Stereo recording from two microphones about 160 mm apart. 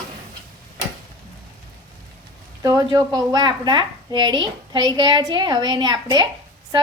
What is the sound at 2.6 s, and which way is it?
A woman's voice, 25° right (ahead or behind).